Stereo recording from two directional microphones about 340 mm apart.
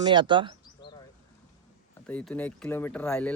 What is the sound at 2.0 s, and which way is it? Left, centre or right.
Speech, centre.